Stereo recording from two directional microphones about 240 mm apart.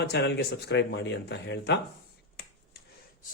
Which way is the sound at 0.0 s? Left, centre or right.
Left.